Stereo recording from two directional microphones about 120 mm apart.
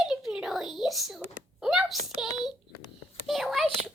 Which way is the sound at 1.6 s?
5° right (ahead or behind).